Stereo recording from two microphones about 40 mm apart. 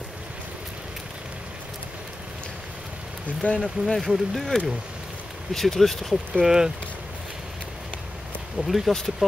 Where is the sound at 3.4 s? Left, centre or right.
Left.